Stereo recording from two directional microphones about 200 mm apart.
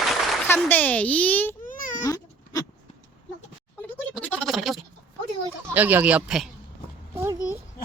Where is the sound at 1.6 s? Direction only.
40° left (ahead or behind).